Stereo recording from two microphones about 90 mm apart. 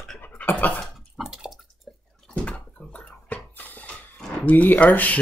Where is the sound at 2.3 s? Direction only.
15° left (ahead or behind).